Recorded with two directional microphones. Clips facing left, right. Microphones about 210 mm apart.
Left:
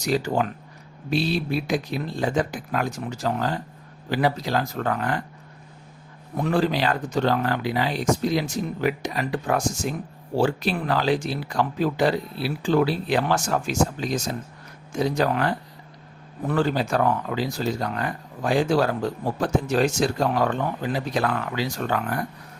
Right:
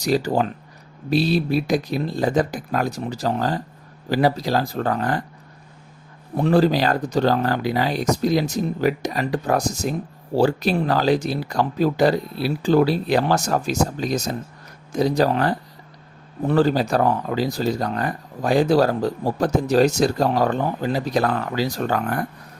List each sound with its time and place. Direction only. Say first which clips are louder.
0.0 s speech: right 3 dB; 35° right (ahead or behind)
6.3 s speech: right 5 dB; 35° right (ahead or behind)